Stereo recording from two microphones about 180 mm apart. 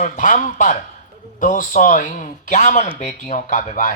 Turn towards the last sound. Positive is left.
turn(degrees=45)  # may be behind; listen again after turning